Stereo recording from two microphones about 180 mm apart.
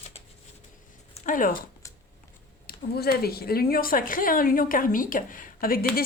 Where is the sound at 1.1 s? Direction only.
50° left (ahead or behind).